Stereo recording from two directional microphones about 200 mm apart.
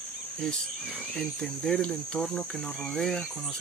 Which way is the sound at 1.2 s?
Centre (ahead or behind).